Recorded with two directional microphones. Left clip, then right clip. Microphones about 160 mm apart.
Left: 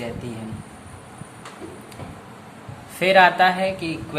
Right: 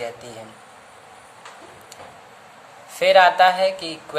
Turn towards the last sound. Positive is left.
turn(degrees=-40)  # may be behind; listen again after turning